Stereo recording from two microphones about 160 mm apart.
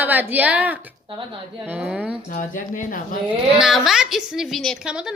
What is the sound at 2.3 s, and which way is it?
Speech, 55° left (ahead or behind).